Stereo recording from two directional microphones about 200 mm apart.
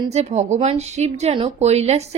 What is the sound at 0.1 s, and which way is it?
A woman's voice, 30° right (ahead or behind).